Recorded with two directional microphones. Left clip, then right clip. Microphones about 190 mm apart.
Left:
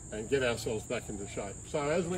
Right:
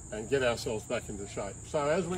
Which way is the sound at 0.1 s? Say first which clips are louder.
Right 1 dB; 10° right (ahead or behind).